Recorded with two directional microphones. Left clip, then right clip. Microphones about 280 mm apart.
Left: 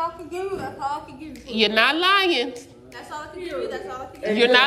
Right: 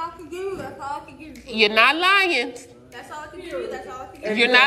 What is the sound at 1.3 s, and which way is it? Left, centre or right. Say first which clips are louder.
A woman's voice: right 2 dB; centre.